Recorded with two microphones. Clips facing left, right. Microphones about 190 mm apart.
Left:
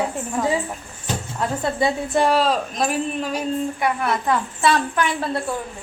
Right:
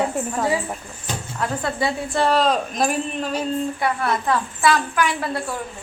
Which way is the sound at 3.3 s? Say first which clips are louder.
Even; 15° left (ahead or behind).